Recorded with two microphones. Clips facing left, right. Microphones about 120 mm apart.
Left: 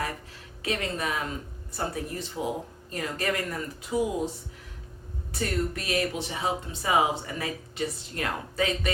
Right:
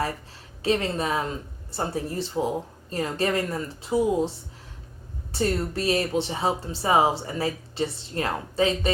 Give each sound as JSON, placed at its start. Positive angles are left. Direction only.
{"t": 0.6, "sound": "speech", "side_deg": -30}